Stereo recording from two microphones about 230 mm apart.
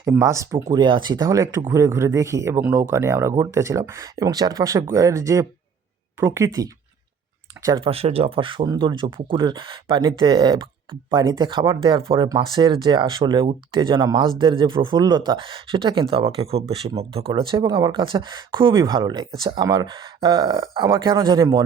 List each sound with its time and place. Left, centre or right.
0.0 s speech: centre